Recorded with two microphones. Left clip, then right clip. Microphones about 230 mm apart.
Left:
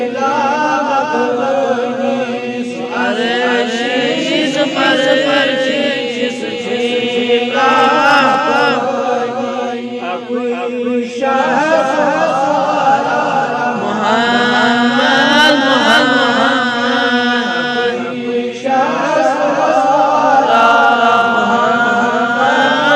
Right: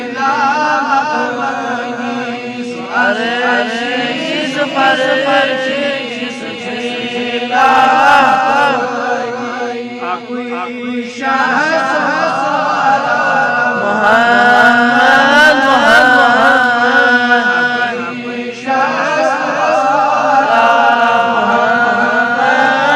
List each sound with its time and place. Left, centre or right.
0.6 s music: centre
3.1 s chant: right
7.5 s chant: right
14.0 s chant: right
20.5 s chant: right